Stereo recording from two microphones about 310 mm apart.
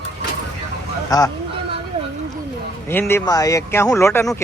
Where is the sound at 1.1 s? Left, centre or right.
Centre.